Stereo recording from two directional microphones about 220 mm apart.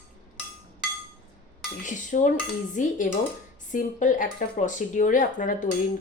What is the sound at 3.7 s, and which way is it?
Speech, 35° left (ahead or behind).